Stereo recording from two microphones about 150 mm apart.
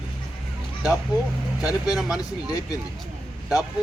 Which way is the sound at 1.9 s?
5° right (ahead or behind).